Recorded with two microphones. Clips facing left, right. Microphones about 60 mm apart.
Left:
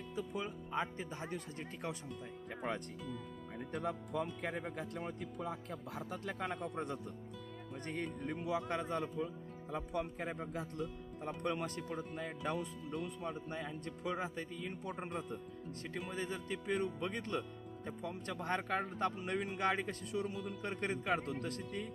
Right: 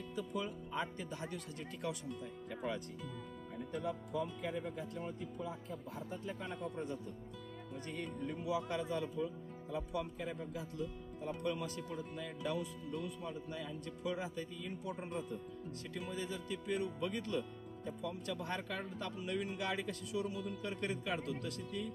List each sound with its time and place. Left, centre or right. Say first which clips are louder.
0.2 s speech: even; left
3.7 s speech: left 1 dB; left
7.9 s speech: left 2 dB; left
13.5 s speech: left 1 dB; left
16.1 s speech: left 1 dB; left